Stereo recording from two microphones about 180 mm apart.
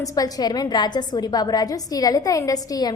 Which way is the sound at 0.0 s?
20° left (ahead or behind).